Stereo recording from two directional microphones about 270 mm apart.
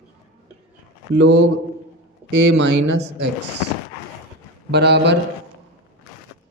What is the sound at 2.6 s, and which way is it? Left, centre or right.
Speech, right.